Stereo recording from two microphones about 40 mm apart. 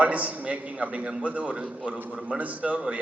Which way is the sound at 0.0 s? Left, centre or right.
Right.